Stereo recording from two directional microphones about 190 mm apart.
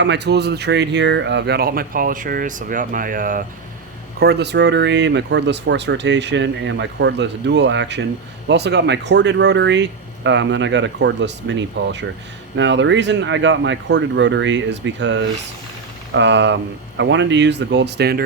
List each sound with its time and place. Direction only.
0.0 s speech: 65° right (ahead or behind); by 3.4 s 45° right (ahead or behind)
4.2 s speech: 60° right (ahead or behind)